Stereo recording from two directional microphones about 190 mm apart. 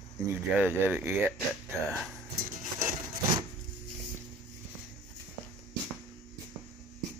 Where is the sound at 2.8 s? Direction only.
15° right (ahead or behind).